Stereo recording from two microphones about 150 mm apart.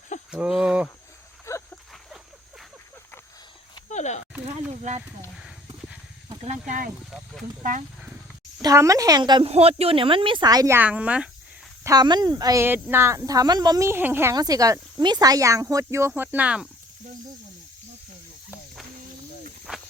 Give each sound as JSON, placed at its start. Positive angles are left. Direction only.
{"t": 0.3, "sound": "speech", "side_deg": -5}
{"t": 1.5, "sound": "a sound", "side_deg": 20}
{"t": 3.8, "sound": "a sound", "side_deg": 50}
{"t": 4.7, "sound": "speech", "side_deg": -45}
{"t": 6.4, "sound": "speech", "side_deg": -50}
{"t": 8.6, "sound": "speech", "side_deg": -20}
{"t": 9.5, "sound": "speech", "side_deg": -40}
{"t": 10.8, "sound": "speech", "side_deg": -10}
{"t": 11.8, "sound": "speech", "side_deg": -25}
{"t": 19.7, "sound": "snake", "side_deg": -5}